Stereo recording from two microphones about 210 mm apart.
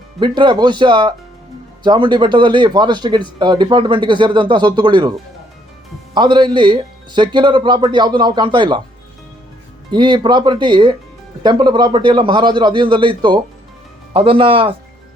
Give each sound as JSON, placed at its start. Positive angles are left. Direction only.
{"t": 0.2, "sound": "a man's voice", "side_deg": -20}
{"t": 6.1, "sound": "a man's voice", "side_deg": -20}
{"t": 9.9, "sound": "a man's voice", "side_deg": -20}